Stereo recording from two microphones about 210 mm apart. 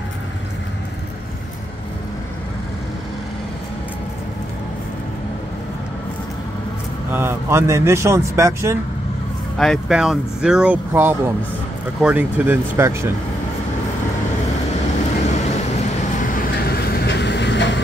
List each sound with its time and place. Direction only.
7.1 s speech: 10° right (ahead or behind)
9.6 s speech: centre (ahead or behind)
15.2 s vehicle: 35° left (ahead or behind); by 17.7 s 55° left (ahead or behind)